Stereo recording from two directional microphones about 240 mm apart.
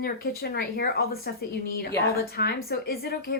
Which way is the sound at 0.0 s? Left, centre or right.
Left.